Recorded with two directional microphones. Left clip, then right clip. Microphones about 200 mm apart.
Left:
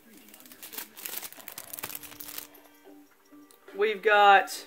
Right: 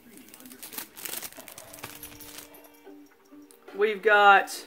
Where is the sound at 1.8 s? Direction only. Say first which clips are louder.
Left 2 dB; 30° left (ahead or behind).